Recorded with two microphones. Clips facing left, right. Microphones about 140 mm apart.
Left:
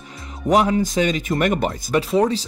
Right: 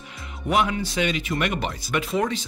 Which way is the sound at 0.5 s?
35° left (ahead or behind).